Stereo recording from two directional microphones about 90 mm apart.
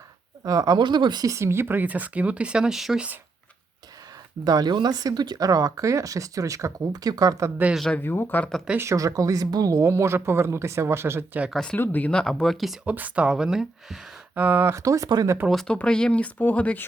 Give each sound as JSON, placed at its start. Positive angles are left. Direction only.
{"t": 0.4, "sound": "speech", "side_deg": -40}
{"t": 0.8, "sound": "speech", "side_deg": -60}
{"t": 1.3, "sound": "speech", "side_deg": -30}
{"t": 4.4, "sound": "speech", "side_deg": -50}
{"t": 7.9, "sound": "speech", "side_deg": 20}
{"t": 8.8, "sound": "a woman's voice", "side_deg": -35}
{"t": 11.5, "sound": "speech", "side_deg": 10}
{"t": 11.8, "sound": "speech", "side_deg": 20}
{"t": 12.8, "sound": "speech", "side_deg": -15}
{"t": 14.3, "sound": "speech", "side_deg": -20}
{"t": 14.8, "sound": "a woman's voice", "side_deg": -40}
{"t": 15.4, "sound": "speech", "side_deg": 5}